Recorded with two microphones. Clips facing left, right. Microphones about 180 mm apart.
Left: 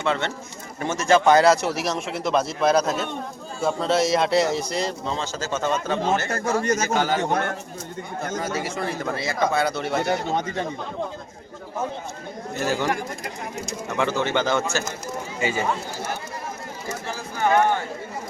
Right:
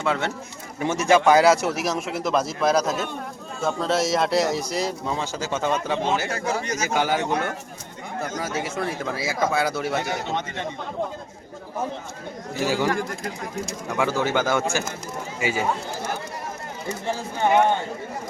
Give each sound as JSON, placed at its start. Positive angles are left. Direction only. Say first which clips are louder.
{"t": 0.0, "sound": "a man's voice", "louder": "even", "side_deg": -5}
{"t": 6.3, "sound": "speech", "louder": "left 4 dB", "side_deg": 50}
{"t": 6.8, "sound": "speech", "louder": "left 1 dB", "side_deg": -10}
{"t": 8.4, "sound": "a man's voice", "louder": "even", "side_deg": 0}
{"t": 10.3, "sound": "speech", "louder": "left 3 dB", "side_deg": 35}
{"t": 12.5, "sound": "speech", "louder": "right 1 dB", "side_deg": -10}
{"t": 13.9, "sound": "speech", "louder": "even", "side_deg": -10}
{"t": 17.1, "sound": "speech", "louder": "right 1 dB", "side_deg": -20}